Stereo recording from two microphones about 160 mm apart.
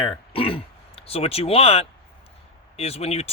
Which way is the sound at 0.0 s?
35° left (ahead or behind).